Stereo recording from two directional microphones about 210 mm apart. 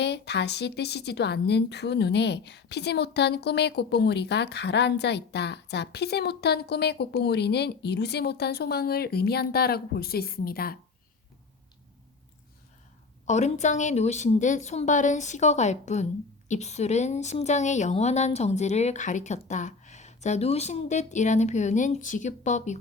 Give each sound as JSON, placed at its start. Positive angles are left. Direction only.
{"t": 0.0, "sound": "speech", "side_deg": 55}
{"t": 13.2, "sound": "a woman's voice", "side_deg": 35}